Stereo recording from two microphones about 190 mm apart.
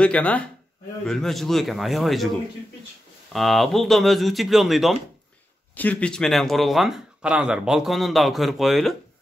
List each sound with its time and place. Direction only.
0.0 s speech: 5° left (ahead or behind)
3.3 s speech: centre (ahead or behind)